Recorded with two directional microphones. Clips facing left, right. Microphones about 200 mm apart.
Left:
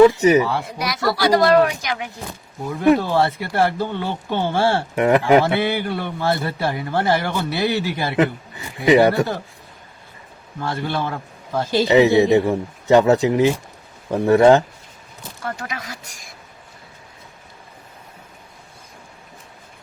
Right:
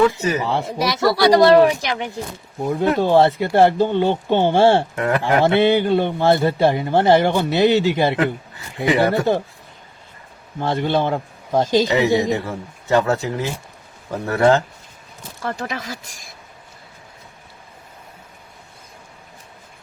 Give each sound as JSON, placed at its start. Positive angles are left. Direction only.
{"t": 0.4, "sound": "a man's voice", "side_deg": -25}
{"t": 4.9, "sound": "speech", "side_deg": 20}
{"t": 5.4, "sound": "a man's voice", "side_deg": -25}
{"t": 8.1, "sound": "speech", "side_deg": 20}
{"t": 10.6, "sound": "a man's voice", "side_deg": -20}
{"t": 11.8, "sound": "speech", "side_deg": 20}
{"t": 15.4, "sound": "a man's voice", "side_deg": -30}